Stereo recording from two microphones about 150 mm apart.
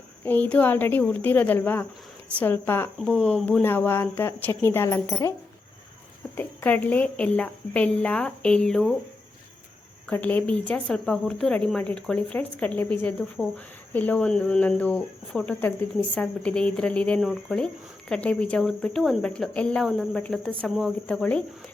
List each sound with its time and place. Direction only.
0.3 s speech: 10° left (ahead or behind)
6.3 s speech: 10° left (ahead or behind)
10.1 s speech: 10° left (ahead or behind)